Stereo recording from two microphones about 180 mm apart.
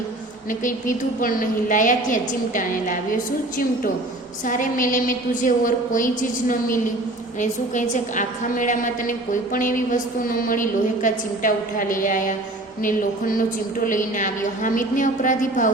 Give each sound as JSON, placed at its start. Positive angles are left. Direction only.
{"t": 0.6, "sound": "a woman's voice", "side_deg": 50}
{"t": 4.4, "sound": "a woman's voice", "side_deg": 45}